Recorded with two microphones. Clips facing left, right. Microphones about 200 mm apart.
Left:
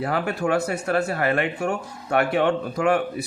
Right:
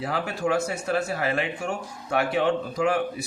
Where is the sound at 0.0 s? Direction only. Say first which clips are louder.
Left 3 dB; 60° left (ahead or behind).